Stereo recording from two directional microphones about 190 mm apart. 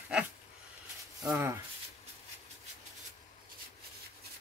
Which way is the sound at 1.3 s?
15° right (ahead or behind).